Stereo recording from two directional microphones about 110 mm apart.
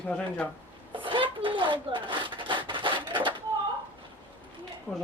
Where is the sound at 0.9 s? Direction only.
50° right (ahead or behind).